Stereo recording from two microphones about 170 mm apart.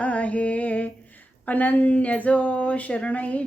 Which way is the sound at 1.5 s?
10° left (ahead or behind).